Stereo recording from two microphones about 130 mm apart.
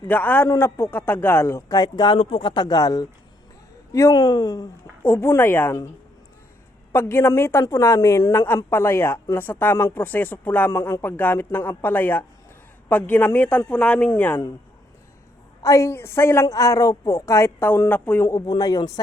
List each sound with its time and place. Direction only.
0.1 s a woman's voice: 15° left (ahead or behind); by 4.7 s 30° left (ahead or behind)
5.0 s speech: 20° left (ahead or behind)
6.9 s a woman's voice: 20° left (ahead or behind)
15.6 s a woman's voice: 25° left (ahead or behind)